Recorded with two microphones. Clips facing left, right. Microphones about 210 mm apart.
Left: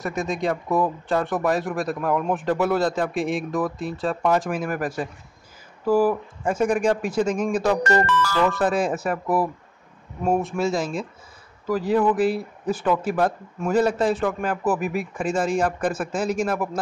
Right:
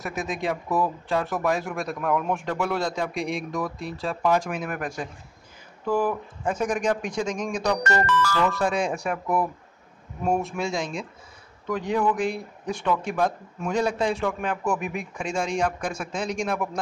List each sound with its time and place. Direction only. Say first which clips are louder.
0.0 s speech: left 4 dB; centre (ahead or behind)
7.8 s speech: left 4 dB; 25° left (ahead or behind)
8.5 s speech: left 3 dB; 5° left (ahead or behind)